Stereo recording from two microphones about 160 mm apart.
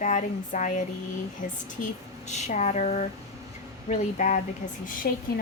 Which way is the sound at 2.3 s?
45° left (ahead or behind).